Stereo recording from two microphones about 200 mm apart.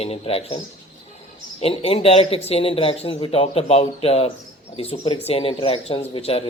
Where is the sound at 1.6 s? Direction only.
30° left (ahead or behind).